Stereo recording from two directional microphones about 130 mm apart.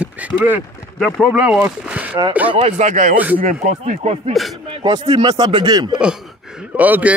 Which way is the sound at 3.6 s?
60° right (ahead or behind).